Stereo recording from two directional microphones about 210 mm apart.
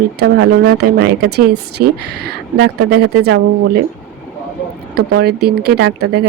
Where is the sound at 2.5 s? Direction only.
50° right (ahead or behind).